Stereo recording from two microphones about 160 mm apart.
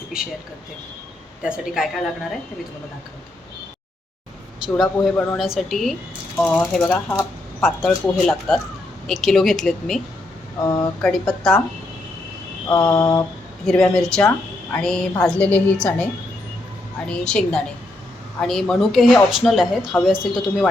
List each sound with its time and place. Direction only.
0.1 s speech: 5° right (ahead or behind)
1.4 s speech: 5° right (ahead or behind)
4.7 s speech: 10° left (ahead or behind)
5.4 s speech: centre (ahead or behind)
10.6 s mantra: 25° left (ahead or behind)
11.0 s speech: 5° left (ahead or behind)
12.6 s mantra: 25° left (ahead or behind)
13.7 s a woman's voice: 5° left (ahead or behind)
17.1 s speech: 5° left (ahead or behind)